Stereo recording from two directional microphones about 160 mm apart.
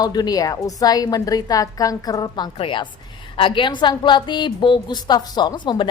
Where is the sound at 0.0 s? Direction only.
25° left (ahead or behind).